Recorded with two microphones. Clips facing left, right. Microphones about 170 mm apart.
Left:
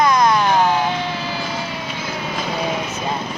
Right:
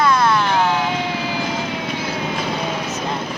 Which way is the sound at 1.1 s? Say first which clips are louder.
Right 2 dB; 15° right (ahead or behind).